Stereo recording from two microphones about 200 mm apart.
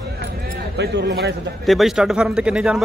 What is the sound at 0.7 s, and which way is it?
Speech, 55° right (ahead or behind).